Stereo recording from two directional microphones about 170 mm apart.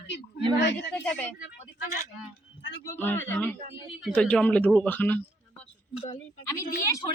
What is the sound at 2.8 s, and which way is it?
Speech, 10° left (ahead or behind).